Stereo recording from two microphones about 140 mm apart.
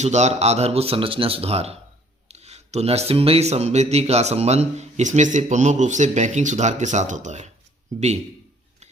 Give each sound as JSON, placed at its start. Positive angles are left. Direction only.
{"t": 0.0, "sound": "a man's voice", "side_deg": -55}